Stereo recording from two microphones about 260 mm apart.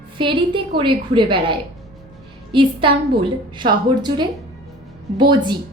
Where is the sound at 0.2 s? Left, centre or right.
Centre.